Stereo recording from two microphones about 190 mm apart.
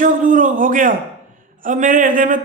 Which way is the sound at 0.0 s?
45° right (ahead or behind).